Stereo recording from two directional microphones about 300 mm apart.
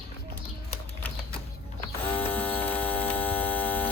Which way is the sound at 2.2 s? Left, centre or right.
Centre.